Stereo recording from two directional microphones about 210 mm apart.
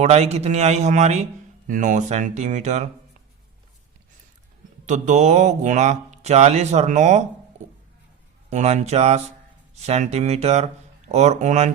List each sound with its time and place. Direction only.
0.0 s a man's voice: 30° right (ahead or behind)
4.9 s a man's voice: 35° right (ahead or behind)
8.4 s a man's voice: 30° right (ahead or behind)